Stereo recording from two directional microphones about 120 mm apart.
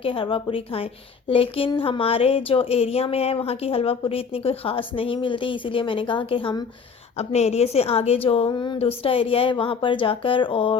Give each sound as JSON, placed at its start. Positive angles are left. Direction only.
{"t": 0.0, "sound": "a woman's voice", "side_deg": 50}
{"t": 7.2, "sound": "a woman's voice", "side_deg": 65}
{"t": 8.8, "sound": "a woman's voice", "side_deg": 55}